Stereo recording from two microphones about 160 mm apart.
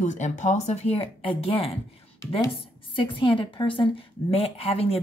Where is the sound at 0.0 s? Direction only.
50° left (ahead or behind).